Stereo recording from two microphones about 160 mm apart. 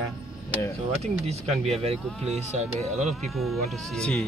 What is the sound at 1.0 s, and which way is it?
Speech, 40° right (ahead or behind).